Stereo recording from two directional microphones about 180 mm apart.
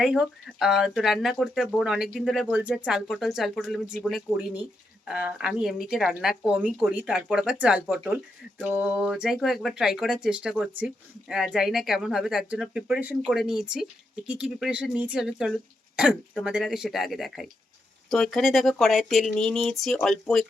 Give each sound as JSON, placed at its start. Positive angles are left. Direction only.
{"t": 0.0, "sound": "speech", "side_deg": 0}